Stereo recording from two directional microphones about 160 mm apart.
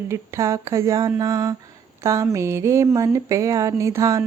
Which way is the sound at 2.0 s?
20° right (ahead or behind).